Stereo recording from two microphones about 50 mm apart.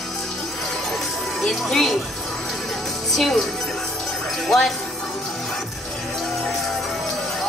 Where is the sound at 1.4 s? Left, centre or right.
Centre.